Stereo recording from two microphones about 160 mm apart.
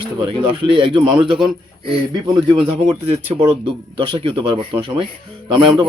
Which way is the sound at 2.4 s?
30° right (ahead or behind).